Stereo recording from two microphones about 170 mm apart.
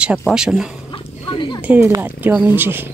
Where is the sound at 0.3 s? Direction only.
5° right (ahead or behind).